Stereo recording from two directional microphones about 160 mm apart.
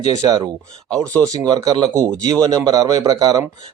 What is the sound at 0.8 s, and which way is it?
Speech, 5° left (ahead or behind).